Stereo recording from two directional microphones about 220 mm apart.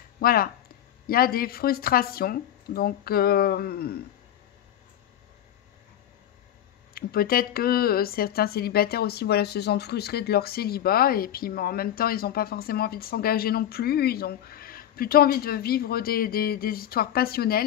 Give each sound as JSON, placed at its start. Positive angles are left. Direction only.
{"t": 0.2, "sound": "speech", "side_deg": 45}
{"t": 6.9, "sound": "speech", "side_deg": 45}